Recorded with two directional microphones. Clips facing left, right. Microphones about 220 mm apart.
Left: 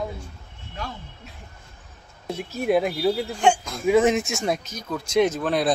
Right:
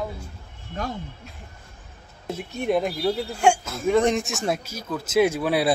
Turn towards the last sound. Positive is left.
turn(degrees=-10)  # may be behind; listen again after turning